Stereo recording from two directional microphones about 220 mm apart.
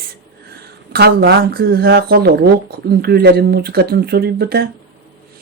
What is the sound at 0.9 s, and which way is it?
Speech, 45° right (ahead or behind).